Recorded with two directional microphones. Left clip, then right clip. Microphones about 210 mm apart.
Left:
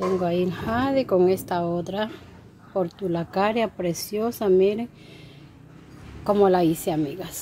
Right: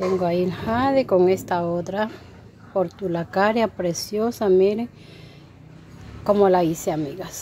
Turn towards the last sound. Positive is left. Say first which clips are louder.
# right 1 dB
turn(degrees=0)  # may be behind; listen again after turning